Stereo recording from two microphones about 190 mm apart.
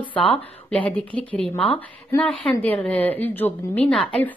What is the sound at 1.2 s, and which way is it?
Speech, 30° right (ahead or behind).